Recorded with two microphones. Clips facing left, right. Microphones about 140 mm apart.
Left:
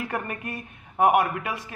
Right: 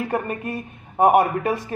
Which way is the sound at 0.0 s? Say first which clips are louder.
Right 6 dB; 25° right (ahead or behind).